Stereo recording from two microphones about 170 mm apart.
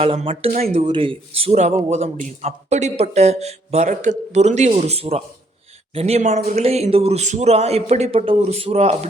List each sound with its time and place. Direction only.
0.0 s speech: 35° right (ahead or behind)